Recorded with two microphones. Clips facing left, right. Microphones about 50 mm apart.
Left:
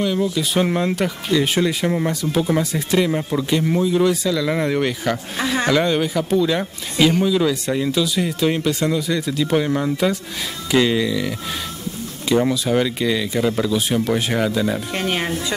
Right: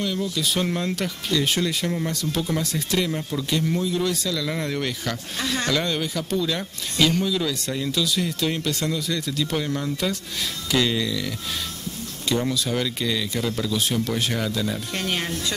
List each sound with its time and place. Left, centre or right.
0.0 s speech: centre